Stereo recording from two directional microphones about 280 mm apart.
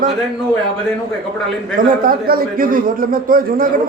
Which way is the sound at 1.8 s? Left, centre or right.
Right.